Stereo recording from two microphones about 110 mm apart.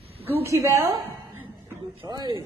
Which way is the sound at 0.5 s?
25° right (ahead or behind).